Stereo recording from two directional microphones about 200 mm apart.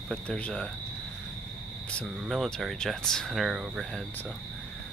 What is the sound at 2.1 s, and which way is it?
Speech, centre (ahead or behind).